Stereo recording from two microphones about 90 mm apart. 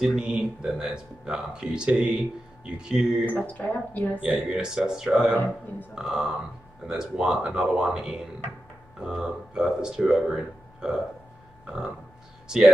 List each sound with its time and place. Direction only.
0.0 s speech: 10° right (ahead or behind)
3.3 s speech: 15° left (ahead or behind)
4.5 s speech: 5° right (ahead or behind)
5.3 s speech: 20° left (ahead or behind)
5.9 s speech: 5° right (ahead or behind)
12.4 s speech: 10° right (ahead or behind)